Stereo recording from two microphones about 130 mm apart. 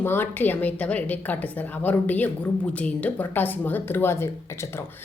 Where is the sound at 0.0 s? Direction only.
15° left (ahead or behind).